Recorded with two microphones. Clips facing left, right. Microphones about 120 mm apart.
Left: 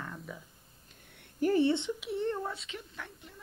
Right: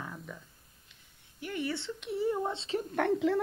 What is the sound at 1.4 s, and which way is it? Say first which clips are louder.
Speech: left 9 dB; 35° left (ahead or behind).